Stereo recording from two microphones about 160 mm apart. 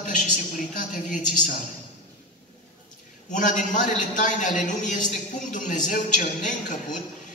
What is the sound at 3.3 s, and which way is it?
A man's voice, 55° left (ahead or behind).